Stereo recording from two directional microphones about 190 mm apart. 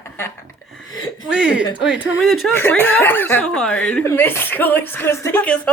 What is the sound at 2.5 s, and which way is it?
Speech, 10° left (ahead or behind).